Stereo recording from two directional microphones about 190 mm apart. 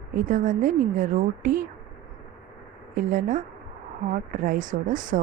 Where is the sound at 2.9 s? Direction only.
45° right (ahead or behind).